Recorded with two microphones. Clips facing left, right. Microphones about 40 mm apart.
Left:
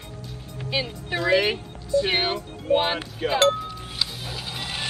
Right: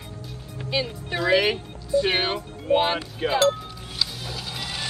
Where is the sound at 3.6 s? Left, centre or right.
Centre.